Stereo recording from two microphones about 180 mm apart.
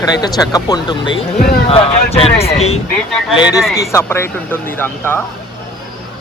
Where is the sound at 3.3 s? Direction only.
25° left (ahead or behind).